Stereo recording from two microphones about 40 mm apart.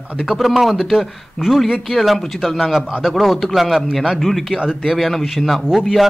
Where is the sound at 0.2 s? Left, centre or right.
Centre.